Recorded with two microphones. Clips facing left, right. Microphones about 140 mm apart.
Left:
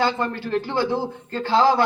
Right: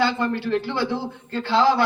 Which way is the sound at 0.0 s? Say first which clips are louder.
Right 1 dB; 45° left (ahead or behind).